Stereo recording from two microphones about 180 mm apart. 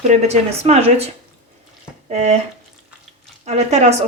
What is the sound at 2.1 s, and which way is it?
Speech, 40° right (ahead or behind).